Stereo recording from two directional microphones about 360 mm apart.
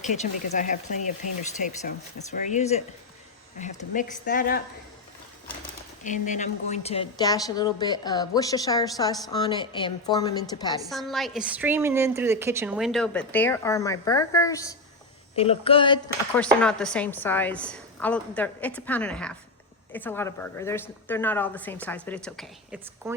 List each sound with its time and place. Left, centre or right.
0.0 s speech: centre
6.0 s a woman's voice: left
10.8 s a woman's voice: centre